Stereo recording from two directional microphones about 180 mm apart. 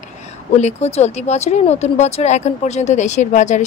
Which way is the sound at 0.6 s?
40° left (ahead or behind).